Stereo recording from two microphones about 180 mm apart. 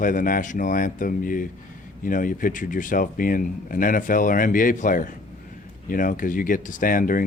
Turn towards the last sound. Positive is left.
turn(degrees=50)  # may be behind; listen again after turning